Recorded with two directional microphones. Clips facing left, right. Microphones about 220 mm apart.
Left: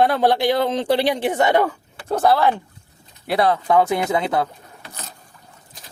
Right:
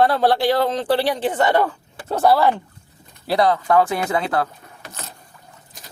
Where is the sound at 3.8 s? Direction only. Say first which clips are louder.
Left 1 dB; 20° left (ahead or behind).